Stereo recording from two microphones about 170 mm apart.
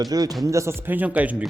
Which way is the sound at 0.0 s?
20° right (ahead or behind).